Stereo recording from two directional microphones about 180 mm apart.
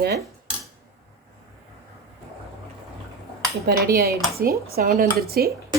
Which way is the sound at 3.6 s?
60° right (ahead or behind).